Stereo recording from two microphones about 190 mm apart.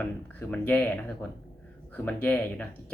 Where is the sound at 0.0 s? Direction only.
10° left (ahead or behind).